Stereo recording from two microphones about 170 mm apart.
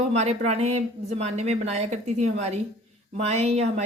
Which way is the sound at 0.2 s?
40° right (ahead or behind).